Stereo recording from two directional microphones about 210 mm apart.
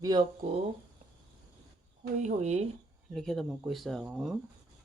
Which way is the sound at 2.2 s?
35° right (ahead or behind).